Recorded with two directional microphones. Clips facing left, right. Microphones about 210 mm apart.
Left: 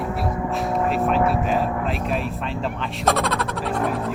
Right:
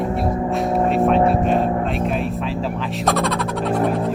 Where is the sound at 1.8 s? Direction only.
Centre (ahead or behind).